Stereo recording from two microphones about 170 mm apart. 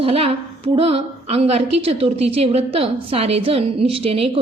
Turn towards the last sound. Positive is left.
turn(degrees=-35)  # may be behind; listen again after turning